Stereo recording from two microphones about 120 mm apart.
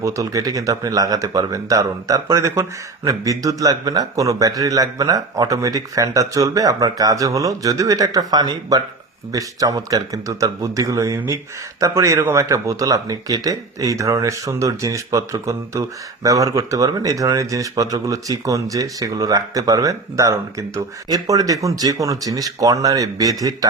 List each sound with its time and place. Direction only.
0.0 s speech: 25° right (ahead or behind)